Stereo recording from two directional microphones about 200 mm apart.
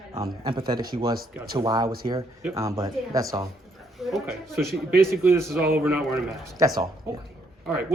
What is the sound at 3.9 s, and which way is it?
Speech, centre (ahead or behind).